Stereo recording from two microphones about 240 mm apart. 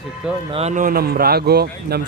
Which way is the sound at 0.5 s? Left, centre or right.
Right.